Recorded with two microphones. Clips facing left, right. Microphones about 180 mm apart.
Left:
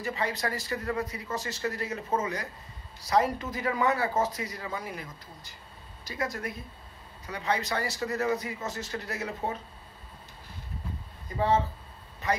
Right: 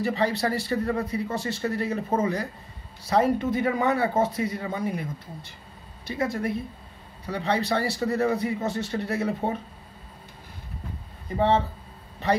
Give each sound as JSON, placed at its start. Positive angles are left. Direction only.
{"t": 0.0, "sound": "a man's voice", "side_deg": -30}
{"t": 6.0, "sound": "a man's voice", "side_deg": -25}
{"t": 11.3, "sound": "a man's voice", "side_deg": -25}